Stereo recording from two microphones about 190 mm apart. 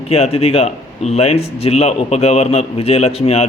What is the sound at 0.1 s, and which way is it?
A man's voice, 30° left (ahead or behind).